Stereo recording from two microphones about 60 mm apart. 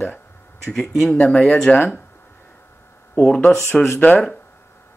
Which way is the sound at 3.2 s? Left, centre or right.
Centre.